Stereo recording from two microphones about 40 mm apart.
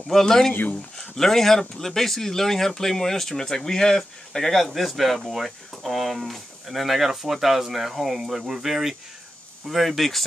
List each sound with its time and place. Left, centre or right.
0.1 s speech: centre
0.5 s speech: left
0.9 s speech: centre